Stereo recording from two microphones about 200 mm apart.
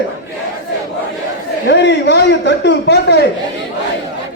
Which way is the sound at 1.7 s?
60° left (ahead or behind).